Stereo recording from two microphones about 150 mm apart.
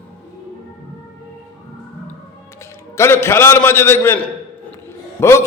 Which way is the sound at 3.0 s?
15° left (ahead or behind).